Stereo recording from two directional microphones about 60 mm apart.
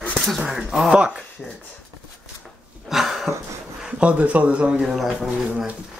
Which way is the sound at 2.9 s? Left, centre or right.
Centre.